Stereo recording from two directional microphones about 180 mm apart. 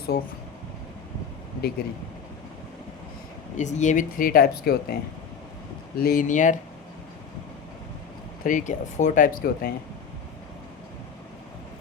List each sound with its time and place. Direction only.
0.1 s speech: 65° left (ahead or behind)
3.6 s speech: 40° left (ahead or behind); by 4.9 s 55° left (ahead or behind)
6.0 s speech: 50° left (ahead or behind)
8.4 s speech: 45° left (ahead or behind)